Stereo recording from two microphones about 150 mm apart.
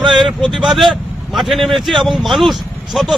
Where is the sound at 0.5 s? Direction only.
Centre (ahead or behind).